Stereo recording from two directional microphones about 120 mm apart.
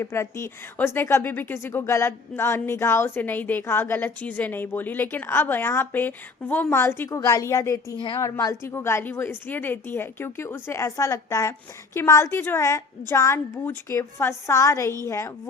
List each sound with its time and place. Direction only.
0.0 s a woman's voice: 25° left (ahead or behind)
7.9 s a woman's voice: 45° left (ahead or behind)
8.2 s a woman's voice: 25° left (ahead or behind)